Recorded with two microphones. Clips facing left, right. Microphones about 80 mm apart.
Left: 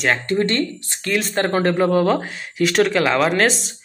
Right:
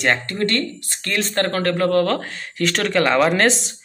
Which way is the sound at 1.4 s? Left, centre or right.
Centre.